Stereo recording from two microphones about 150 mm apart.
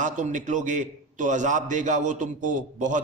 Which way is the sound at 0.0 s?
55° right (ahead or behind).